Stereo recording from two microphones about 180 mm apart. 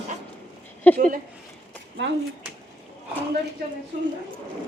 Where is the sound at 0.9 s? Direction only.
50° right (ahead or behind).